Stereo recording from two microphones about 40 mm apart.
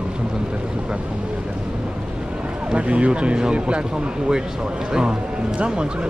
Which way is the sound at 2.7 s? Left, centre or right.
Right.